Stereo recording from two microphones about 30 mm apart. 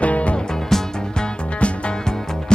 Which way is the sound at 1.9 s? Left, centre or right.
Left.